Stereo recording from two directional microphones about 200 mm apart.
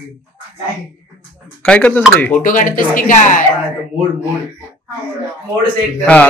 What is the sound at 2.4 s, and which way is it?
Speech, 40° left (ahead or behind).